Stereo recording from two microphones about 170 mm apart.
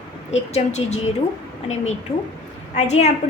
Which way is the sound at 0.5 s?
40° left (ahead or behind).